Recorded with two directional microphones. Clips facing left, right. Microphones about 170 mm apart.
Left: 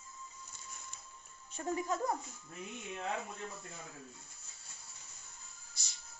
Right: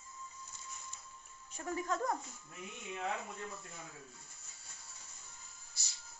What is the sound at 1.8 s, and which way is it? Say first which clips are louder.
Speech: right 2 dB; 10° left (ahead or behind).